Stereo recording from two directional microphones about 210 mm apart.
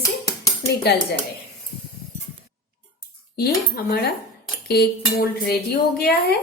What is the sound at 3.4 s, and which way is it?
A woman's voice, 50° left (ahead or behind).